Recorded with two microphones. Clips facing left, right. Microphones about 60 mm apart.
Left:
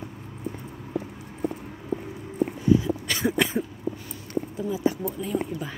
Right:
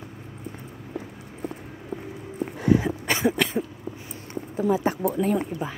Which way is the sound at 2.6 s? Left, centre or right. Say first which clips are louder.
Right 1 dB; right.